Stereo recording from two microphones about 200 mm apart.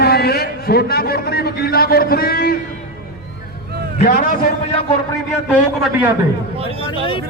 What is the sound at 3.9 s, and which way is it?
Speech, 40° left (ahead or behind).